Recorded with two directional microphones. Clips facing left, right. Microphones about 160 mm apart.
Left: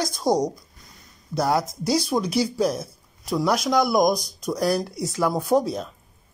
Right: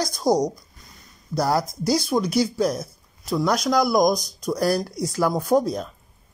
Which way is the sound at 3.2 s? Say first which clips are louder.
Right 1 dB; 10° left (ahead or behind).